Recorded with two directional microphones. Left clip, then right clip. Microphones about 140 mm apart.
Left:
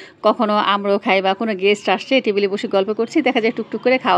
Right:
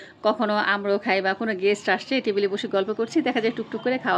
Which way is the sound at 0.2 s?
40° left (ahead or behind).